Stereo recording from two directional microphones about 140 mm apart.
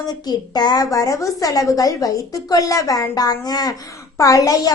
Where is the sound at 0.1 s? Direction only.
30° left (ahead or behind).